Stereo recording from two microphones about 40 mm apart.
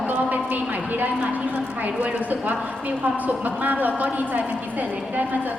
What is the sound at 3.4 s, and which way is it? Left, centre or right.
Speech, right.